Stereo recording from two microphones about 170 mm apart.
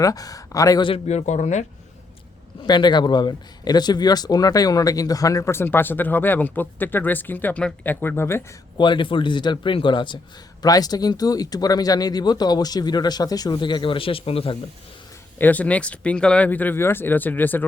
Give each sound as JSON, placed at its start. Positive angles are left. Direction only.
{"t": 0.0, "sound": "speech", "side_deg": 20}
{"t": 2.6, "sound": "speech", "side_deg": 25}
{"t": 8.8, "sound": "speech", "side_deg": 30}
{"t": 15.4, "sound": "speech", "side_deg": 10}